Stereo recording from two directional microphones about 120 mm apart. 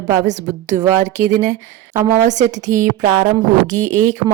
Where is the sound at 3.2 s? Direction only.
90° right.